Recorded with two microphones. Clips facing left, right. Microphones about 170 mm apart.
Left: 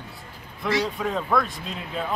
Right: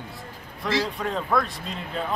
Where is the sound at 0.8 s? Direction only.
Centre (ahead or behind).